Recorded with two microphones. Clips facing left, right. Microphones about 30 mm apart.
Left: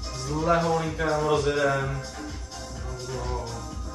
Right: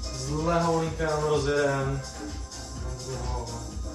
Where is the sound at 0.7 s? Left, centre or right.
Left.